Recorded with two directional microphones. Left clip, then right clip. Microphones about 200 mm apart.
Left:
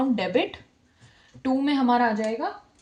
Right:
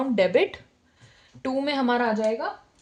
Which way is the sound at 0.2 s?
45° right (ahead or behind).